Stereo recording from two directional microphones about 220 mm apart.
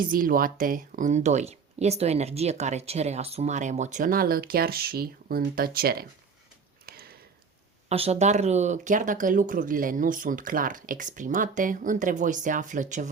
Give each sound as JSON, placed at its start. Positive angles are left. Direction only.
{"t": 0.0, "sound": "speech", "side_deg": -40}
{"t": 6.8, "sound": "a sound", "side_deg": -45}
{"t": 7.9, "sound": "speech", "side_deg": -30}